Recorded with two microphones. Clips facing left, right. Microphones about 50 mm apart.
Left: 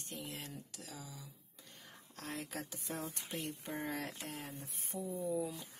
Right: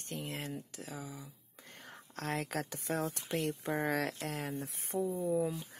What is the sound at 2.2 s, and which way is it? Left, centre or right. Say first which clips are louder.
Speech: right 7 dB; right.